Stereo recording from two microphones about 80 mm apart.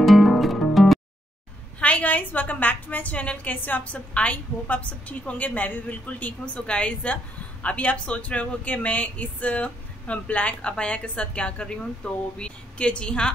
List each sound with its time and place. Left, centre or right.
0.0 s music: centre
1.8 s speech: centre